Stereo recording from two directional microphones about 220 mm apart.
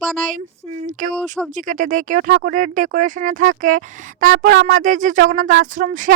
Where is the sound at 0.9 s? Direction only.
35° right (ahead or behind).